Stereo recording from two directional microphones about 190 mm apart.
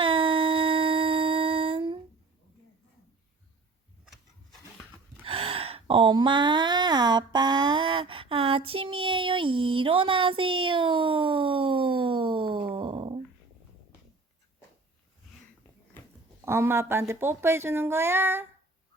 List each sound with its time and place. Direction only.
0.0 s a sound: 25° right (ahead or behind)
5.2 s speech: 30° right (ahead or behind)
16.5 s speech: 10° right (ahead or behind)